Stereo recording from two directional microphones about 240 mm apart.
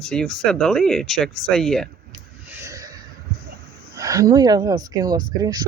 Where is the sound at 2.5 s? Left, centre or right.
Centre.